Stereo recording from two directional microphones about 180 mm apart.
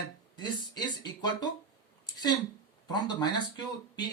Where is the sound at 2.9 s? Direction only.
20° left (ahead or behind).